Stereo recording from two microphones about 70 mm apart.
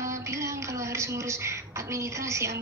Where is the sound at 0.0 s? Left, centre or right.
Right.